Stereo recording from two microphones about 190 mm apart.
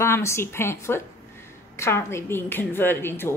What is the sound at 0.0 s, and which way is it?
A woman's voice, 15° left (ahead or behind).